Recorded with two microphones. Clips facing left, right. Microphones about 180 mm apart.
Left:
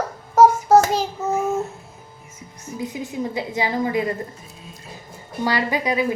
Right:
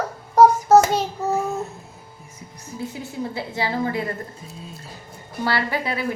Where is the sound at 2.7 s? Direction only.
15° left (ahead or behind).